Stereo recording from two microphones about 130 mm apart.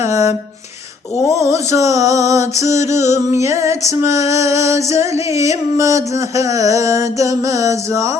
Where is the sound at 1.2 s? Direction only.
25° right (ahead or behind).